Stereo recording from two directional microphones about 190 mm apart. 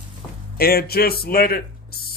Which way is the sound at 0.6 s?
55° left (ahead or behind).